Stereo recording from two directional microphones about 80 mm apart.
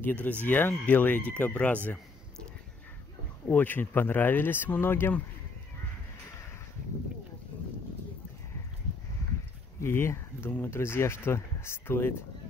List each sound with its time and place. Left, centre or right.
0.0 s speech: centre
3.4 s speech: left
9.8 s speech: left